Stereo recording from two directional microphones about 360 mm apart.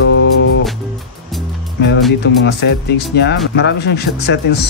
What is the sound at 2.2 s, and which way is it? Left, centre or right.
Speech, left.